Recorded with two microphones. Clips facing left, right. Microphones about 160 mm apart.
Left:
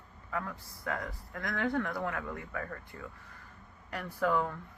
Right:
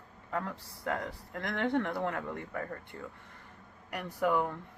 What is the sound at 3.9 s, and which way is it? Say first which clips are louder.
Speech: right 1 dB; 15° right (ahead or behind).